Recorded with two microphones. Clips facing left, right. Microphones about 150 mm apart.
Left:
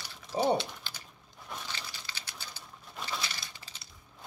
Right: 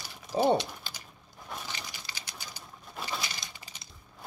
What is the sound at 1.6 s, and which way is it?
Pigeon, 15° right (ahead or behind).